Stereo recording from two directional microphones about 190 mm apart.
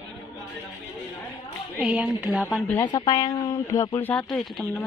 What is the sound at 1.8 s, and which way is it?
Speech, 5° right (ahead or behind).